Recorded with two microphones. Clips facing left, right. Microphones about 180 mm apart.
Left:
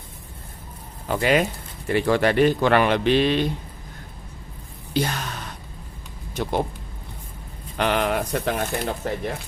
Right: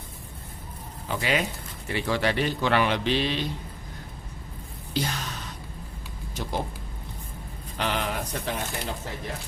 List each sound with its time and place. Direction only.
1.0 s a man's voice: 50° left (ahead or behind)
4.9 s speech: 55° left (ahead or behind)
7.8 s speech: 60° left (ahead or behind)